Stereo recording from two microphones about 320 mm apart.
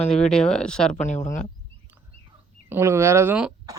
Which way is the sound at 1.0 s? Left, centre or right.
Left.